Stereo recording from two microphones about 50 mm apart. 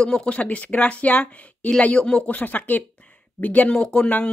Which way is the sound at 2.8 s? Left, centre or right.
Left.